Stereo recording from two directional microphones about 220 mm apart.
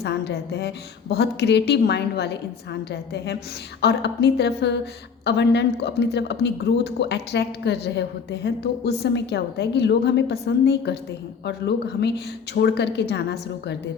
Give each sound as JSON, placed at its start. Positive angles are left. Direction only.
{"t": 0.0, "sound": "a man's voice", "side_deg": 50}